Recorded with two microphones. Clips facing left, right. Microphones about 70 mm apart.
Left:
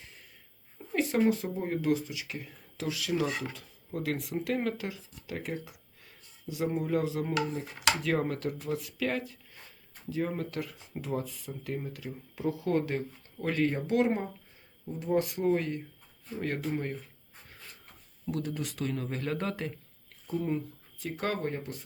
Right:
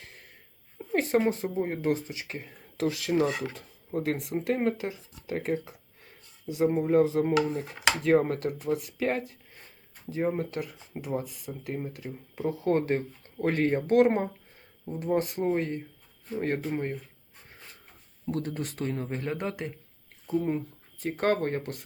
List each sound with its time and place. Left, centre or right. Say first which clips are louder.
0.9 s speech: right 4 dB; right
1.2 s speech: even; right
3.5 s speech: right 6 dB; right
7.9 s speech: right 5 dB; right
18.3 s speech: right 2 dB; right
19.0 s speech: right 1 dB; right
20.2 s speech: right 4 dB; right
21.0 s speech: right 6 dB; right